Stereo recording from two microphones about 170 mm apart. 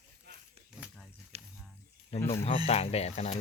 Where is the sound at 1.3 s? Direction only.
40° right (ahead or behind).